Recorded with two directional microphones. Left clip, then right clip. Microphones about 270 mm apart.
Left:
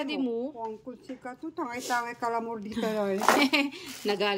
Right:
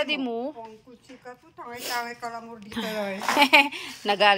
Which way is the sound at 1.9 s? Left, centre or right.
Left.